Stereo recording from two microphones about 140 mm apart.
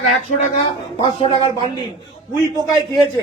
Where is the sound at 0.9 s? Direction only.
35° left (ahead or behind).